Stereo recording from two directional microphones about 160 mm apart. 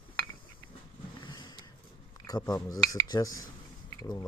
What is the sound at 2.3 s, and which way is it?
A man's voice, 25° left (ahead or behind).